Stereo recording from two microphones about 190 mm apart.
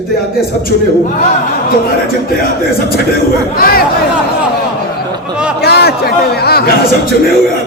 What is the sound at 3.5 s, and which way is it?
Speech, 50° left (ahead or behind).